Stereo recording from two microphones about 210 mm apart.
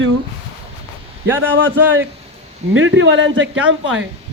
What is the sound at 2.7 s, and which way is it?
Speech, 65° right (ahead or behind).